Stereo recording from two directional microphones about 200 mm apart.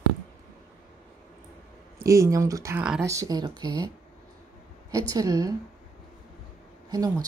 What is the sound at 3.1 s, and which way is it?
Speech, 20° right (ahead or behind).